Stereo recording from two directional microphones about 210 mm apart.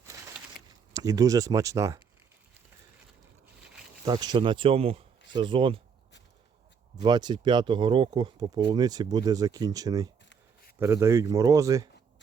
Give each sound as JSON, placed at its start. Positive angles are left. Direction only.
{"t": 0.0, "sound": "a sound", "side_deg": -15}
{"t": 0.9, "sound": "speech", "side_deg": -15}
{"t": 4.0, "sound": "speech", "side_deg": -20}
{"t": 6.9, "sound": "speech", "side_deg": -20}